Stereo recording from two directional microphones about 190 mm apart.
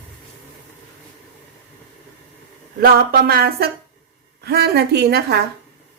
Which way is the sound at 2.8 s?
50° right (ahead or behind).